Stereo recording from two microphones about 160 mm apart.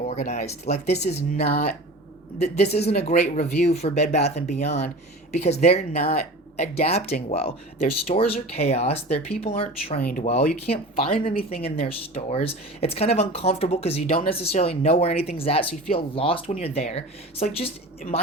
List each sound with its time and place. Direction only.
0.1 s speech: 45° left (ahead or behind)
2.6 s speech: 40° left (ahead or behind)
10.0 s speech: 60° left (ahead or behind)
10.7 s speech: 35° left (ahead or behind)